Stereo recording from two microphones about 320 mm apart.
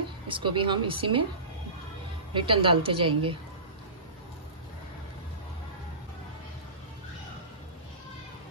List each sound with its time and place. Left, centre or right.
0.3 s a woman's voice: centre
2.3 s a woman's voice: centre